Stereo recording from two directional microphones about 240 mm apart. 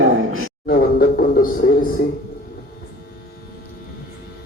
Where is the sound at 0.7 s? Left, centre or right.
Left.